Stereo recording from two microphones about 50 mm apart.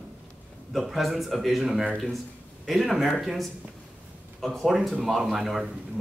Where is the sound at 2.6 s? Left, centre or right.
Centre.